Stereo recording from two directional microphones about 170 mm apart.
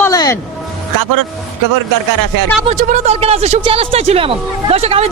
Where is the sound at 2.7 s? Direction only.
50° right (ahead or behind).